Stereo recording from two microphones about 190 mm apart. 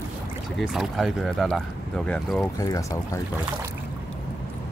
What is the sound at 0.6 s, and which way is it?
Speech, centre (ahead or behind).